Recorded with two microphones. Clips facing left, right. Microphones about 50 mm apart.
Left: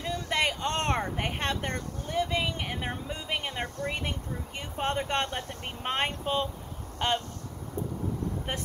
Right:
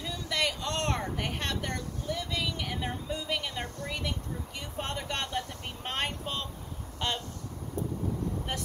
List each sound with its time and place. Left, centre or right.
0.0 s a sound: left
7.0 s speech: left
8.5 s speech: left